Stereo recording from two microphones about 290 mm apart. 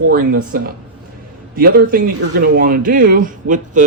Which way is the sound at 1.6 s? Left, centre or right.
Right.